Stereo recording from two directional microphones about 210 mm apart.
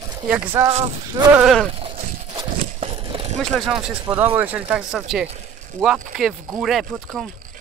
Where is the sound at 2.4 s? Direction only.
25° right (ahead or behind).